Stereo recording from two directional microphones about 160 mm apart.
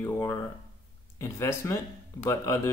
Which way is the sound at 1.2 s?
20° left (ahead or behind).